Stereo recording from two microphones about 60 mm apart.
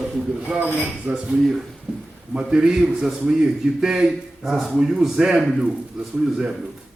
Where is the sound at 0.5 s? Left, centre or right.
Right.